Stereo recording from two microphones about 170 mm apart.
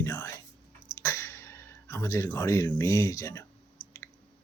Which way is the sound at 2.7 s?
20° left (ahead or behind).